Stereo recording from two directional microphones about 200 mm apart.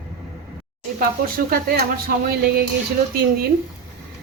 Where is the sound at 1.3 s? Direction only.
50° right (ahead or behind).